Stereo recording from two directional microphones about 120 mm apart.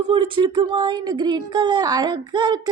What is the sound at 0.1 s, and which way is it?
Speech, 45° right (ahead or behind).